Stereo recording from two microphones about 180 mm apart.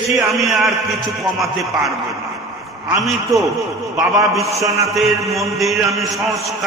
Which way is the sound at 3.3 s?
20° right (ahead or behind).